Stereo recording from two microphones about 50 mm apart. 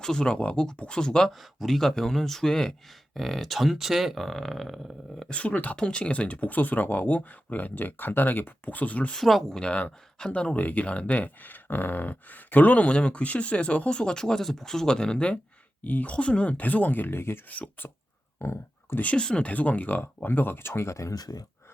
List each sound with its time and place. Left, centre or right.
0.0 s speech: centre
1.3 s speech: centre
3.2 s speech: centre
5.3 s speech: left
9.1 s speech: centre
9.6 s speech: centre
15.8 s speech: left
17.5 s speech: left
18.3 s a sound: left
19.1 s speech: centre
19.5 s speech: left